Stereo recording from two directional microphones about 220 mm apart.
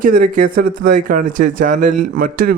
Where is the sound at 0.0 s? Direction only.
35° right (ahead or behind).